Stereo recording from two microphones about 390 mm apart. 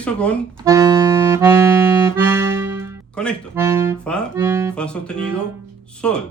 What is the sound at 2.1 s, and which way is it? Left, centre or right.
Speech, centre.